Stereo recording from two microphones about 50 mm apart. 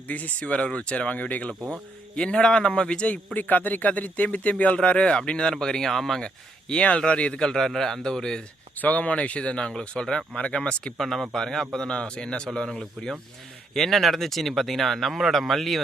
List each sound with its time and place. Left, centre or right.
0.1 s speech: left
3.3 s speech: left; by 6.2 s centre
6.2 s a man's voice: left
8.8 s speech: left
10.9 s a man's voice: centre